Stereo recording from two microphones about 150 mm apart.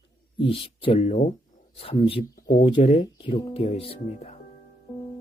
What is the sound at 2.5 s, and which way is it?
Speech, 30° left (ahead or behind).